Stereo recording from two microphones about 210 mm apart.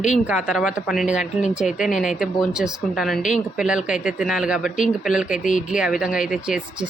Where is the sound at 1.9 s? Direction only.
35° left (ahead or behind).